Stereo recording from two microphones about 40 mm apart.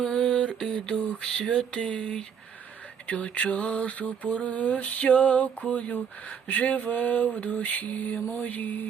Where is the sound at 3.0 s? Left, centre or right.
Left.